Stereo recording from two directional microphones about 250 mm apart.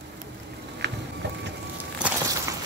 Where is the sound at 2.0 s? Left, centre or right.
Centre.